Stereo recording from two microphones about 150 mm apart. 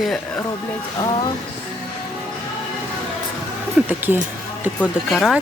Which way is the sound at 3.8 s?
10° right (ahead or behind).